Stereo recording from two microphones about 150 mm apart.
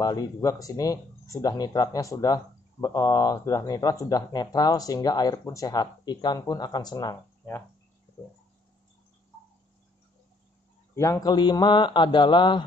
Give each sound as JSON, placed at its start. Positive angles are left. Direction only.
{"t": 0.0, "sound": "speech", "side_deg": 25}
{"t": 11.0, "sound": "a man's voice", "side_deg": 25}